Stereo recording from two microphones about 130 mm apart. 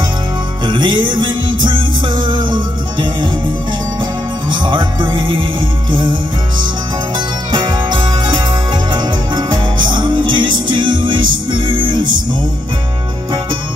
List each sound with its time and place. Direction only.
0.7 s music: 35° right (ahead or behind)
4.5 s music: 35° right (ahead or behind)
7.5 s music: 35° right (ahead or behind)